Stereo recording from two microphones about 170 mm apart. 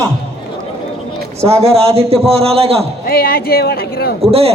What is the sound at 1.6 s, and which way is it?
A man's voice, 35° right (ahead or behind).